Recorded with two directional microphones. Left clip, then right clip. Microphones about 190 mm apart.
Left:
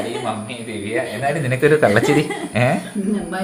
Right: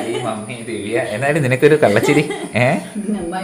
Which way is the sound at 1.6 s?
15° right (ahead or behind).